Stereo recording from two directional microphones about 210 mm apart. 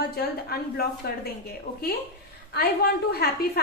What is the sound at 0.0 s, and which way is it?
A woman's voice, 50° left (ahead or behind).